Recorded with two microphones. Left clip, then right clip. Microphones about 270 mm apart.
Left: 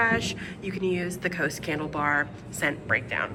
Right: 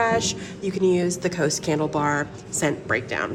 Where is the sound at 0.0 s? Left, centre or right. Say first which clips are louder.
Right 3 dB; centre.